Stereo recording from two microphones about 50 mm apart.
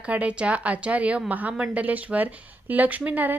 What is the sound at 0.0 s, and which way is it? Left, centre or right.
A woman's voice, right.